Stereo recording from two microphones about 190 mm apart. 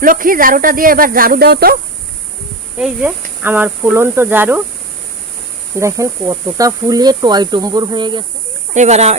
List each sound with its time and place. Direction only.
0.0 s speech: 45° right (ahead or behind)
2.7 s speech: 5° right (ahead or behind)
5.7 s speech: 15° right (ahead or behind)
8.7 s speech: 35° right (ahead or behind)